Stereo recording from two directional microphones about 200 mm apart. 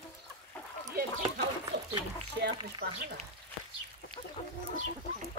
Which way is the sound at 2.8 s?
50° right (ahead or behind).